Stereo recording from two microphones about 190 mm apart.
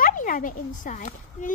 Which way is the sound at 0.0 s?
45° left (ahead or behind).